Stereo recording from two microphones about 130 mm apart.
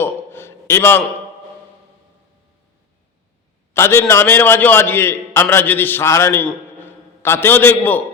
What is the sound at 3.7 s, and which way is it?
A man's voice, 20° left (ahead or behind).